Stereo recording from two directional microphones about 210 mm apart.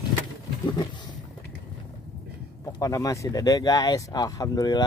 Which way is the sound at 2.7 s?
15° left (ahead or behind).